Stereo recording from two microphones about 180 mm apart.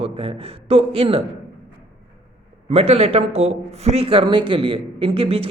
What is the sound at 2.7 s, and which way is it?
Speech, 35° right (ahead or behind).